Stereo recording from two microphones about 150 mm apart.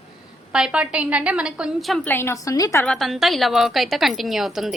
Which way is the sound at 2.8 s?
Centre (ahead or behind).